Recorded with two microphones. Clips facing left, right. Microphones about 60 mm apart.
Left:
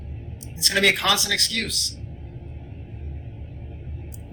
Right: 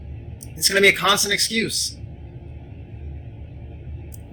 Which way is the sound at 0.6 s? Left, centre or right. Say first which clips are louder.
Right 4 dB; right.